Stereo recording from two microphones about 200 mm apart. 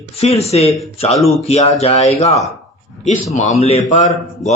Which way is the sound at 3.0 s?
35° left (ahead or behind).